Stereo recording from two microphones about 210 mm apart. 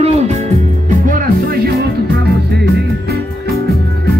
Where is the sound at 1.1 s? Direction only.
45° right (ahead or behind).